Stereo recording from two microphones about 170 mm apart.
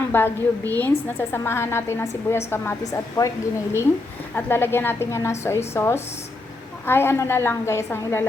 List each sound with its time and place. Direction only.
0.1 s a woman's voice: 10° left (ahead or behind)